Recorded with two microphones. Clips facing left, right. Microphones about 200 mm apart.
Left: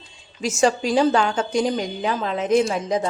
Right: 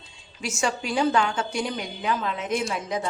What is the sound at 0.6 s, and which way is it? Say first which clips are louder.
A woman's voice: left 6 dB; 35° left (ahead or behind).